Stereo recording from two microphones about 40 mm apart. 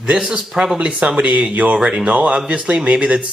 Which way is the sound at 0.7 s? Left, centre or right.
Right.